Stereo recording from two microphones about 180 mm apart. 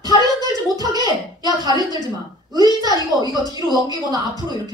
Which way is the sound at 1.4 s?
20° right (ahead or behind).